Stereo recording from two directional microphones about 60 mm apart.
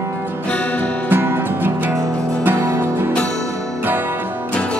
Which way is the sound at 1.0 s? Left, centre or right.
Right.